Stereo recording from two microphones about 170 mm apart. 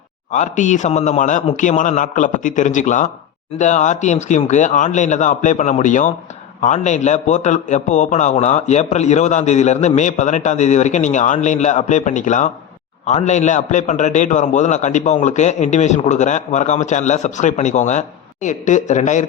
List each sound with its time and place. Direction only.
0.3 s a man's voice: 45° left (ahead or behind)